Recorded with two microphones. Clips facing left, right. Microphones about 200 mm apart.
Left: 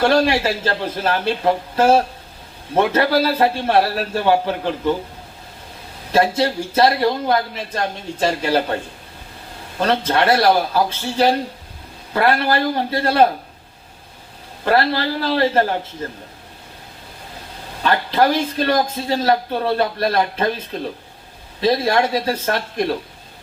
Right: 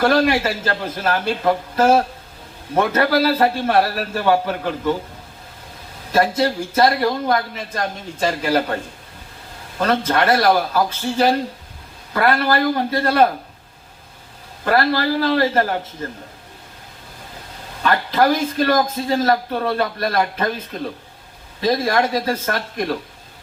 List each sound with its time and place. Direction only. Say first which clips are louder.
0.0 s speech: even; 30° left (ahead or behind)
6.4 s speech: even; 30° left (ahead or behind)
9.8 s speech: left 1 dB; 30° left (ahead or behind)
14.6 s speech: even; 30° left (ahead or behind)
17.8 s speech: even; 30° left (ahead or behind)
21.6 s speech: left 1 dB; 30° left (ahead or behind)